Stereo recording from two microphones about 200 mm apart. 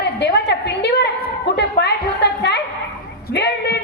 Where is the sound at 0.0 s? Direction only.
60° left (ahead or behind).